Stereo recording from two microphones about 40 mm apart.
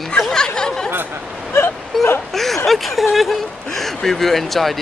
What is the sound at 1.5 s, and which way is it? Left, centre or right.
Speech, left.